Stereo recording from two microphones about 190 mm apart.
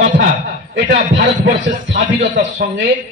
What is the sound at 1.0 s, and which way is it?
Speech, 45° right (ahead or behind).